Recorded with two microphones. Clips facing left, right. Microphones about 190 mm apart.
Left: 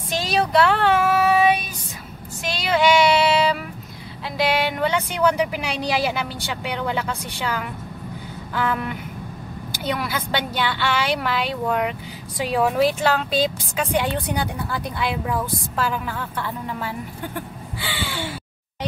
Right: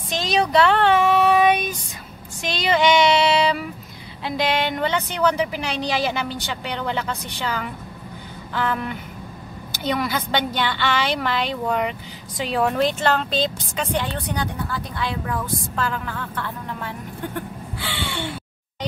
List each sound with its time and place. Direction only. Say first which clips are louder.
0.1 s child singing: right 1 dB; 5° left (ahead or behind)
2.4 s a woman's voice: even; 5° left (ahead or behind)
17.7 s caw: even; centre (ahead or behind)